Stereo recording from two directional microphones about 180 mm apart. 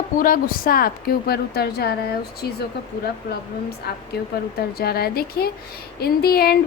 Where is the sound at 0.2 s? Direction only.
50° left (ahead or behind).